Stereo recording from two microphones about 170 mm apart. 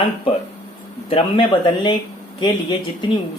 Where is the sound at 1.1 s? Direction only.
30° left (ahead or behind).